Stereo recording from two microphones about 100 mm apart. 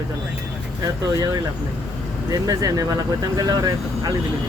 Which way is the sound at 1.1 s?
40° right (ahead or behind).